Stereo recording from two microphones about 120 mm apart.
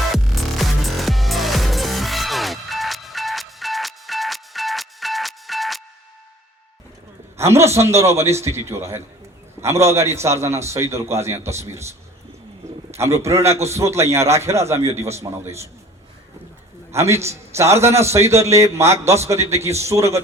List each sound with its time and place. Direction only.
0.1 s music: centre (ahead or behind)
7.3 s a man's voice: 25° right (ahead or behind)
13.2 s a man's voice: 25° right (ahead or behind)
14.8 s a man's voice: 60° right (ahead or behind)
16.9 s a man's voice: 25° right (ahead or behind)